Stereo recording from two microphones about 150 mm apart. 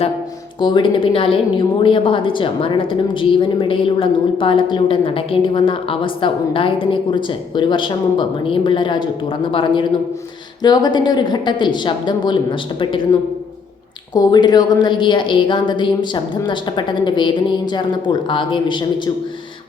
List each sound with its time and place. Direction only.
0.6 s a woman's voice: 30° left (ahead or behind)
14.1 s a woman's voice: 30° left (ahead or behind)